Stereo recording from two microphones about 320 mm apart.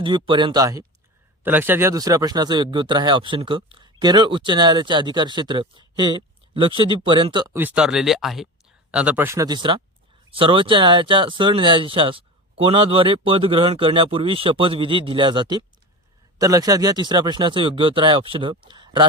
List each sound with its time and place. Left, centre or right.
0.0 s speech: centre